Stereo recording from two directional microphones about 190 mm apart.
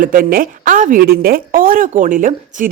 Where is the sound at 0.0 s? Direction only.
50° right (ahead or behind).